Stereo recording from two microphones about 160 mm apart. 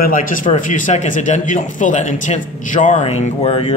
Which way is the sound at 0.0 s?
60° left (ahead or behind).